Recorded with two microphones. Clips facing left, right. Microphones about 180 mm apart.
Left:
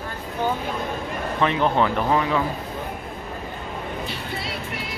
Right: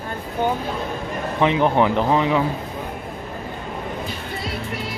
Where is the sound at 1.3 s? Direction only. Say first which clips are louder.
Right 3 dB; 15° right (ahead or behind).